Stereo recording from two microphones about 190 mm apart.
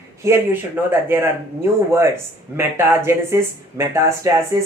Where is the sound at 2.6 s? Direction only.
10° right (ahead or behind).